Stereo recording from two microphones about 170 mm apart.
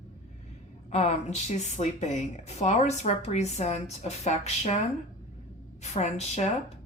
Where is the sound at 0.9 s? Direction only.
40° left (ahead or behind).